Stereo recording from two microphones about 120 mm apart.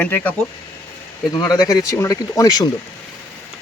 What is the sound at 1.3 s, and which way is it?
Speech, 35° left (ahead or behind).